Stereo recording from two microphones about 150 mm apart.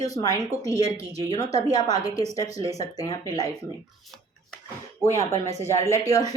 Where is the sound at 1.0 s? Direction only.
45° right (ahead or behind).